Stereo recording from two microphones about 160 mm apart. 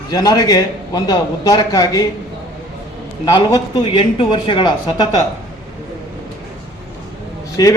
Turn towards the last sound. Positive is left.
turn(degrees=25)  # may be behind; listen again after turning